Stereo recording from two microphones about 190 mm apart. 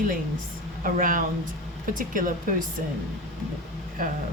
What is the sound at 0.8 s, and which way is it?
Speech, 45° right (ahead or behind).